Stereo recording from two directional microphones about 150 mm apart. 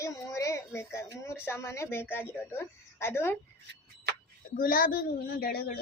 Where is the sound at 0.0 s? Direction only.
20° left (ahead or behind).